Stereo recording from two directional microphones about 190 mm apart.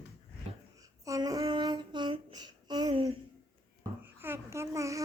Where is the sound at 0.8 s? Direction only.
15° right (ahead or behind).